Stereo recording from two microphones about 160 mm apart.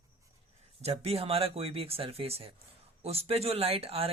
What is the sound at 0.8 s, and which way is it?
Speech, 40° right (ahead or behind).